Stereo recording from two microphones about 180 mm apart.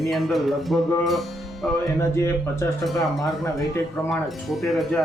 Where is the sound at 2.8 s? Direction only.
Centre (ahead or behind).